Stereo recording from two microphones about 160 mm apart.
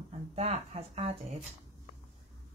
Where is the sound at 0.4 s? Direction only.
40° right (ahead or behind).